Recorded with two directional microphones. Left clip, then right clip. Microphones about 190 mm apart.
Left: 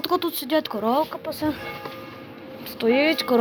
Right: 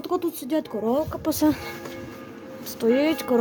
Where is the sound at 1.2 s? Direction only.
45° right (ahead or behind).